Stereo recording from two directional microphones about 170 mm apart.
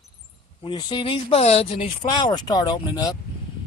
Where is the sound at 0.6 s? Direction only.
25° left (ahead or behind).